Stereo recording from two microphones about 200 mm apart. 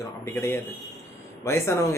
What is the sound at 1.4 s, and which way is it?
Speech, 15° left (ahead or behind).